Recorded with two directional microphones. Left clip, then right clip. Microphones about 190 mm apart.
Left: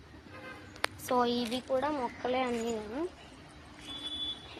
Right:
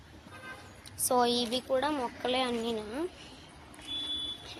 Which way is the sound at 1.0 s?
5° right (ahead or behind).